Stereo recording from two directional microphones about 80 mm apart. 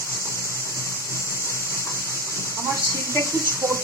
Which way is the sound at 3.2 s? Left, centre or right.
Right.